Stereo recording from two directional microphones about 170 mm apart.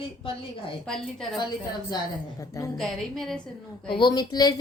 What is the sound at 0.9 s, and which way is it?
Speech, centre (ahead or behind).